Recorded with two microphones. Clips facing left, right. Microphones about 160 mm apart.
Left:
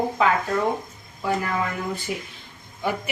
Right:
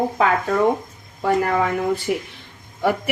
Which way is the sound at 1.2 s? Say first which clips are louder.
Right 6 dB; 60° right (ahead or behind).